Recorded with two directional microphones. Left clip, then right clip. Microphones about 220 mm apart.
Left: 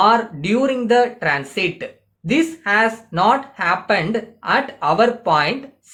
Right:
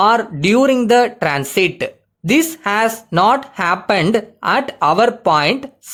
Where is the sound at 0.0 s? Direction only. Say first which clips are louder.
Right 2 dB; 50° right (ahead or behind).